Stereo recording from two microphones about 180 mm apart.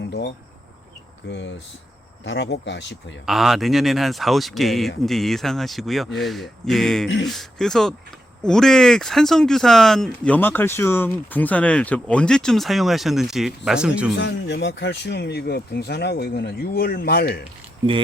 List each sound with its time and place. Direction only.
1.3 s speech: 80° left
3.2 s speech: centre (ahead or behind)
14.2 s speech: 70° left (ahead or behind)